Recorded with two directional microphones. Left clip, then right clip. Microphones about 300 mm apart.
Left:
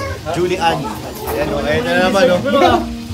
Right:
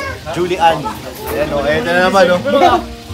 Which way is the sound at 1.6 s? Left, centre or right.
Centre.